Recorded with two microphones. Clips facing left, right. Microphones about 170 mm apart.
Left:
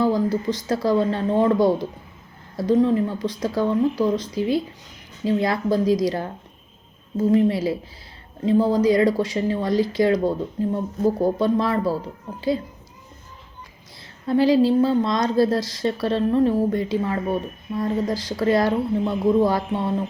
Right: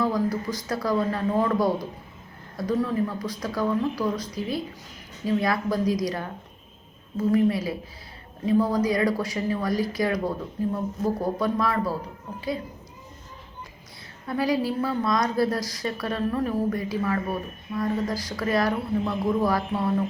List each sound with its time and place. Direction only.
0.0 s speech: 25° left (ahead or behind)
14.3 s speech: 25° left (ahead or behind)